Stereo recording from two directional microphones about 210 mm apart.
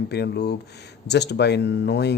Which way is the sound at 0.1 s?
50° left (ahead or behind).